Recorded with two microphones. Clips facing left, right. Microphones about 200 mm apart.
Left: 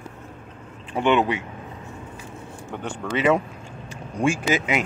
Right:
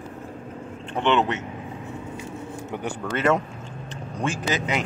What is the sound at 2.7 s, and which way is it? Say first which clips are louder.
Speech: left 2 dB; centre (ahead or behind).